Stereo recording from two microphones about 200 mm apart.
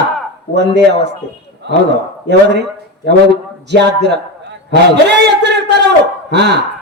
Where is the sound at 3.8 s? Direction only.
60° right (ahead or behind).